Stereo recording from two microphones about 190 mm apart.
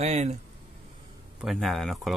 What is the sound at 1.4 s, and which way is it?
Speech, centre (ahead or behind).